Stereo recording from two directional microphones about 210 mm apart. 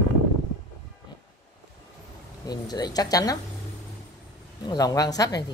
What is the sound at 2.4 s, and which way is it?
Speech, 20° left (ahead or behind).